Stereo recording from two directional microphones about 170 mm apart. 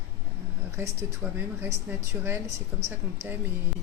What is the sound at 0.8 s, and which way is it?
Speech, 10° right (ahead or behind).